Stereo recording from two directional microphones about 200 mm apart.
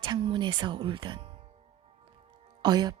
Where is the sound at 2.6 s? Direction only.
20° right (ahead or behind).